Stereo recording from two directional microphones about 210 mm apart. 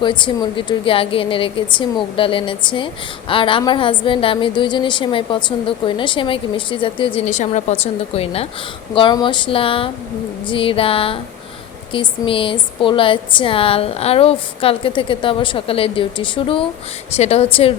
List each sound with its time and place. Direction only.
0.0 s a woman's voice: 20° left (ahead or behind)